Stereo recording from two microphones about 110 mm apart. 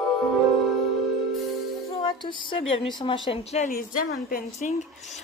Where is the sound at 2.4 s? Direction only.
50° left (ahead or behind); by 3.7 s 80° left.